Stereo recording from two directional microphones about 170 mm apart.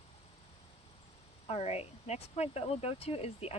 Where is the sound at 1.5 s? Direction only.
40° left (ahead or behind).